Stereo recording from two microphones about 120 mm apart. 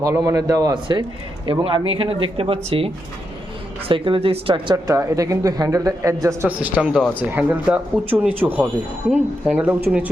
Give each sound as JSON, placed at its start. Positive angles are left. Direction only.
{"t": 0.0, "sound": "speech", "side_deg": -30}
{"t": 1.5, "sound": "speech", "side_deg": -45}
{"t": 4.7, "sound": "speech", "side_deg": -25}
{"t": 6.6, "sound": "speech", "side_deg": -10}